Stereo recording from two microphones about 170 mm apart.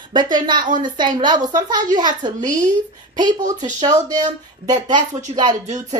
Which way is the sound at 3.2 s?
25° right (ahead or behind).